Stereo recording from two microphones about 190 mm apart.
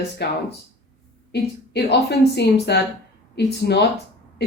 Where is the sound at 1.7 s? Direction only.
60° left (ahead or behind).